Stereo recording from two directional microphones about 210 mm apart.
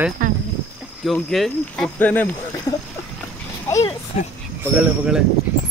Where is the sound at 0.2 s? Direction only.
40° right (ahead or behind).